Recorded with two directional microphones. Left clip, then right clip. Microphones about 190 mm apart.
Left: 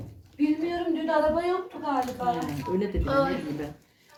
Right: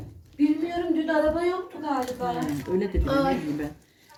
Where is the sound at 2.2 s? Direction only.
40° right (ahead or behind).